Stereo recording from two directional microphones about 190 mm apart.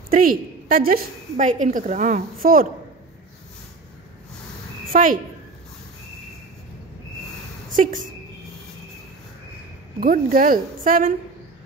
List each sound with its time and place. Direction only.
0.1 s a woman's voice: 45° right (ahead or behind)
4.9 s a woman's voice: 45° right (ahead or behind)
7.7 s a woman's voice: 45° right (ahead or behind)
9.9 s a woman's voice: 45° right (ahead or behind)